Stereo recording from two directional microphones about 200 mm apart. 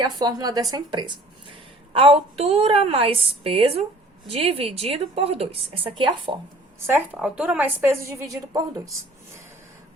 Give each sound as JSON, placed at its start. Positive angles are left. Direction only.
{"t": 0.0, "sound": "a woman's voice", "side_deg": -20}
{"t": 6.7, "sound": "a woman's voice", "side_deg": -10}